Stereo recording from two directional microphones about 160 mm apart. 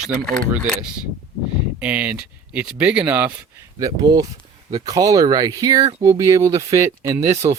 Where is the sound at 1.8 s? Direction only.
10° right (ahead or behind).